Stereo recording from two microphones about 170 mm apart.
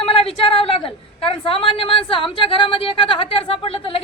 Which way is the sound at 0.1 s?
30° left (ahead or behind).